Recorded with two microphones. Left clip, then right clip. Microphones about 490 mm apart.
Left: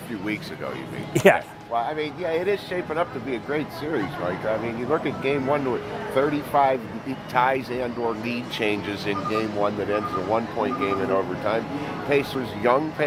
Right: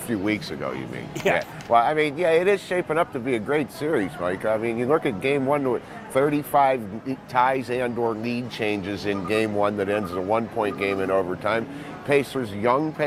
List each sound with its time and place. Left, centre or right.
1.7 s speech: right
9.4 s speech: right